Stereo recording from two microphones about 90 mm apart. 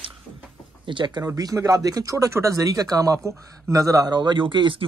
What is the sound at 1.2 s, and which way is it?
Speech, 35° right (ahead or behind).